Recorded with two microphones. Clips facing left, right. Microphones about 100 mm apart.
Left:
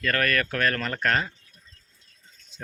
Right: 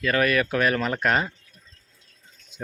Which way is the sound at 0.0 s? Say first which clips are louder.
Right 3 dB; 10° right (ahead or behind).